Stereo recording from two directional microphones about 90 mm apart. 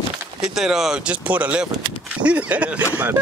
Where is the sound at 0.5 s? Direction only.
5° right (ahead or behind).